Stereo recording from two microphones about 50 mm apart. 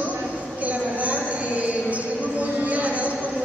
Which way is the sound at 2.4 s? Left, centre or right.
Right.